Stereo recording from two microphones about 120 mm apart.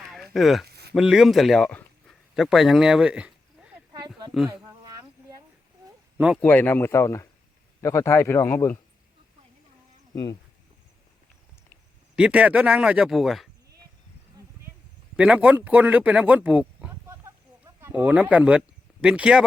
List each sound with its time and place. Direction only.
0.0 s a sound: centre (ahead or behind)
2.3 s speech: centre (ahead or behind)
6.1 s speech: 10° right (ahead or behind)
6.4 s a man's voice: 15° left (ahead or behind)
12.1 s speech: 10° right (ahead or behind)
15.1 s speech: 10° right (ahead or behind)